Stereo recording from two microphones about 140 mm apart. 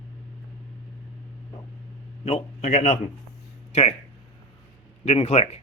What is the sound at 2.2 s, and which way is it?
A man's voice, 50° left (ahead or behind).